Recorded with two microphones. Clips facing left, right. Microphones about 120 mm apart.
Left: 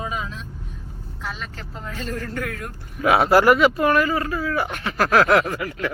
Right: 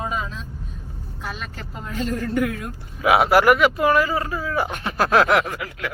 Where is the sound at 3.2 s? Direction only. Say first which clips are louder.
Left 3 dB; 5° right (ahead or behind).